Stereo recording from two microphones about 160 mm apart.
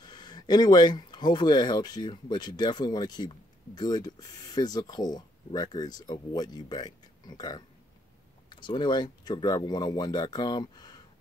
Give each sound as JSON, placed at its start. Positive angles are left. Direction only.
{"t": 0.0, "sound": "speech", "side_deg": 25}